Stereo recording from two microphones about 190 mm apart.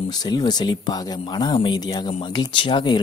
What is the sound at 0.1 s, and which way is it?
Speech, 20° left (ahead or behind).